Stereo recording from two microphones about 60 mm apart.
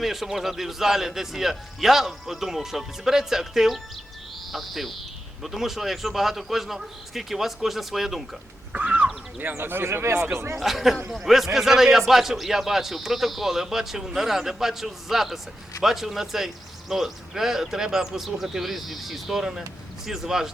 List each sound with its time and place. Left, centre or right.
0.0 s a man's voice: centre
8.7 s speech: right
9.4 s speech: right
10.6 s a man's voice: centre